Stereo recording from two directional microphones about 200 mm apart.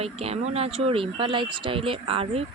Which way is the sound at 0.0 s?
30° right (ahead or behind).